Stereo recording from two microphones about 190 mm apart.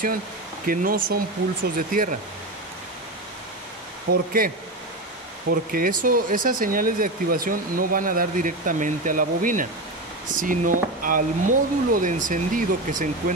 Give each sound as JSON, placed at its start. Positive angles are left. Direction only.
{"t": 0.7, "sound": "speech", "side_deg": -45}
{"t": 4.1, "sound": "speech", "side_deg": -50}
{"t": 5.5, "sound": "speech", "side_deg": -50}